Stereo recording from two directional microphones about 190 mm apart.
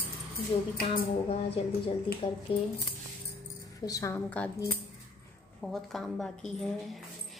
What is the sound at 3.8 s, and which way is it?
Speech, 20° left (ahead or behind).